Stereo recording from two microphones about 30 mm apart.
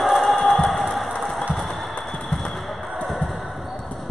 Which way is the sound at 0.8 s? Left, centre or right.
Centre.